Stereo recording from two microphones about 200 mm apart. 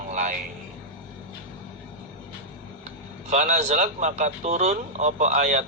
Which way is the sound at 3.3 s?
35° right (ahead or behind).